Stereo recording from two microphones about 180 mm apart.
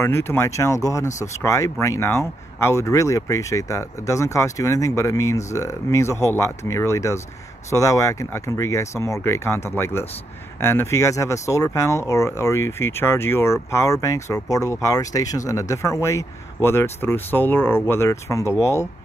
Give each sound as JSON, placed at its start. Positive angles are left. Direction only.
{"t": 0.0, "sound": "speech", "side_deg": 15}